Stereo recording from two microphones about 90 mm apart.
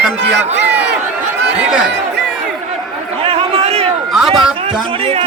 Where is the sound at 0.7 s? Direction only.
15° right (ahead or behind).